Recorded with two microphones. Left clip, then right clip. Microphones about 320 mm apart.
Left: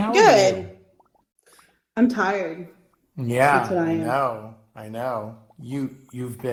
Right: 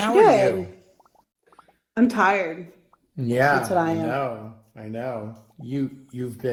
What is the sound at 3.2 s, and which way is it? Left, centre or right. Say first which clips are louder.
Speech: left 2 dB; centre.